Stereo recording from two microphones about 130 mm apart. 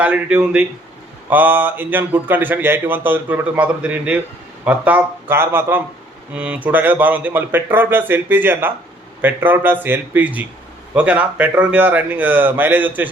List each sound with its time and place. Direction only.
0.0 s speech: 10° right (ahead or behind)